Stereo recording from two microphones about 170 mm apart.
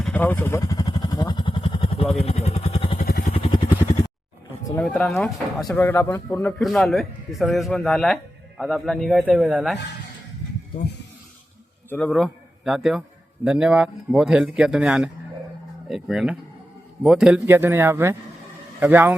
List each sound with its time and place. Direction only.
0.0 s vehicle: 10° left (ahead or behind); by 3.0 s 30° left (ahead or behind)
3.1 s vehicle: 55° left (ahead or behind)
3.3 s vehicle: 30° left (ahead or behind)
4.7 s a man's voice: 5° left (ahead or behind)
6.6 s a man's voice: centre (ahead or behind)
11.9 s a man's voice: 5° left (ahead or behind); by 19.1 s 10° right (ahead or behind)